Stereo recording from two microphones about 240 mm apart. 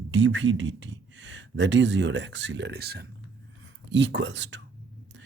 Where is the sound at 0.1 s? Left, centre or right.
Right.